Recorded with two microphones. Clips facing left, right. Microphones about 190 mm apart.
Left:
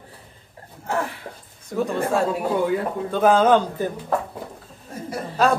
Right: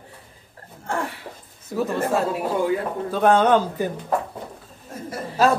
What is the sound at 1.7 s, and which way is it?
Speech, 5° right (ahead or behind).